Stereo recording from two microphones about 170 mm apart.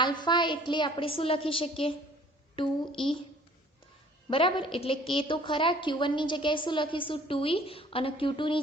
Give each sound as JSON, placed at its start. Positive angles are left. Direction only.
{"t": 0.0, "sound": "a woman's voice", "side_deg": 25}
{"t": 4.3, "sound": "a woman's voice", "side_deg": 30}